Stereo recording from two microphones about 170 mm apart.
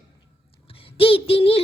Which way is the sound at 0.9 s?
35° left (ahead or behind).